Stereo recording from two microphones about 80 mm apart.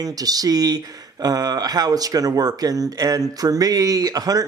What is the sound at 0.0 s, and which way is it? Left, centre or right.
Speech, right.